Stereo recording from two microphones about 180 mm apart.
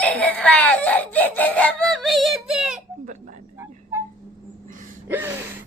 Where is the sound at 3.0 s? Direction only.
45° right (ahead or behind).